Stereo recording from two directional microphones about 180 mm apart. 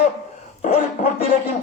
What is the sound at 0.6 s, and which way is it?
Speech, 40° left (ahead or behind).